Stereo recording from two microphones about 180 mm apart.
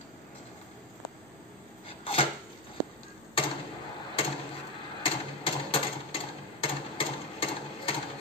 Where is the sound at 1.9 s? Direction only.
30° left (ahead or behind).